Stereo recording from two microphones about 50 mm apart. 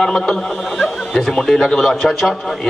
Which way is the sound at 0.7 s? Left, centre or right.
Centre.